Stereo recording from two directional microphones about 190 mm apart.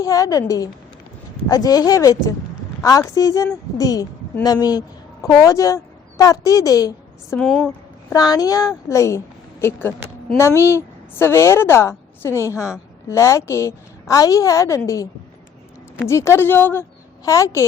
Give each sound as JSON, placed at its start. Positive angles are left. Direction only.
{"t": 0.0, "sound": "a woman's voice", "side_deg": 15}
{"t": 7.3, "sound": "a woman's voice", "side_deg": 0}
{"t": 8.1, "sound": "a woman's voice", "side_deg": 20}
{"t": 16.0, "sound": "a woman's voice", "side_deg": 15}